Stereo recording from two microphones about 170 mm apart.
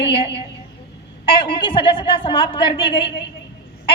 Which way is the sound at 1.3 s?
30° left (ahead or behind).